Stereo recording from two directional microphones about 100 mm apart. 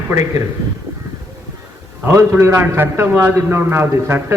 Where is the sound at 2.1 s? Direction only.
30° right (ahead or behind).